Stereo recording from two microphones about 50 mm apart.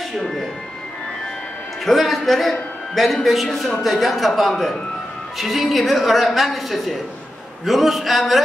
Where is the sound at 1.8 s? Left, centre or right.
Centre.